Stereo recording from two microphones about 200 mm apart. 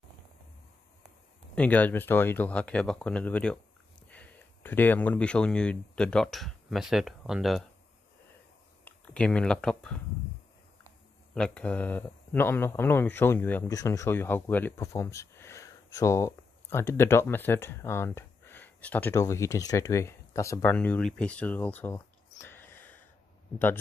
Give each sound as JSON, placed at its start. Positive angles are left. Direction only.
{"t": 1.5, "sound": "speech", "side_deg": 5}
{"t": 8.8, "sound": "speech", "side_deg": 5}
{"t": 11.3, "sound": "speech", "side_deg": 5}